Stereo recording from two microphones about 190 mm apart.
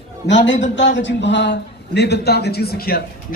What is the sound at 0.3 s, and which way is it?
A man's voice, 70° left (ahead or behind).